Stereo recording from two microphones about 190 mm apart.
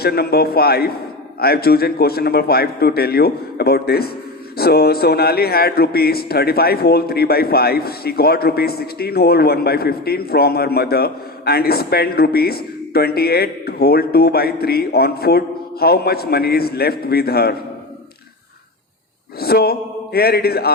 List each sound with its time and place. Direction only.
0.0 s a man's voice: 55° left (ahead or behind)
19.4 s a man's voice: 55° left (ahead or behind)